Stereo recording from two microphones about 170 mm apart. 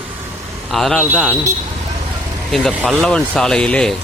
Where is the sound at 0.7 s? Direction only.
Centre (ahead or behind).